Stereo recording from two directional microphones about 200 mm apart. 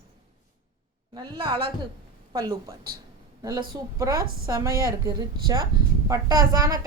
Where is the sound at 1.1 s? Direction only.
20° right (ahead or behind).